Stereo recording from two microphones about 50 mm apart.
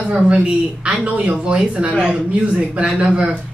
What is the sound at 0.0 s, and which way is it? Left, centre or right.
A man's voice, centre.